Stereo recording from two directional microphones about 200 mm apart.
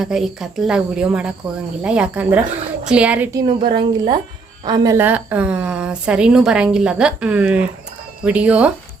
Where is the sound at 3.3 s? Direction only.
25° right (ahead or behind); by 8.7 s 5° right (ahead or behind).